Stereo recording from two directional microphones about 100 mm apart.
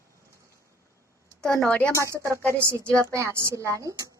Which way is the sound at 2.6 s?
25° right (ahead or behind).